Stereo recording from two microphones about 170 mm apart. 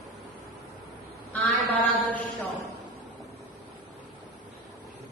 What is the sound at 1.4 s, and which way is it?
Mantra, 10° left (ahead or behind).